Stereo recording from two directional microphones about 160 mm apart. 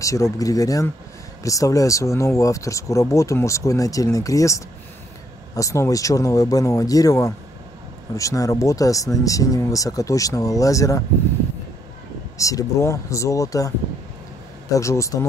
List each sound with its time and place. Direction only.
0.0 s speech: 20° left (ahead or behind)
12.4 s speech: 20° left (ahead or behind)
14.7 s speech: 20° left (ahead or behind)